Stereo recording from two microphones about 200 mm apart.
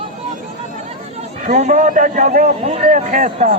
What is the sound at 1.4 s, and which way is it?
A man's voice, 40° right (ahead or behind).